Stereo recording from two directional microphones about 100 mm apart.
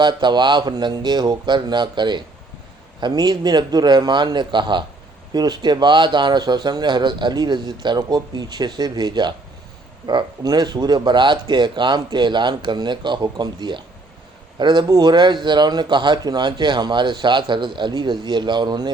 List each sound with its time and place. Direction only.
0.0 s speech: 50° right (ahead or behind)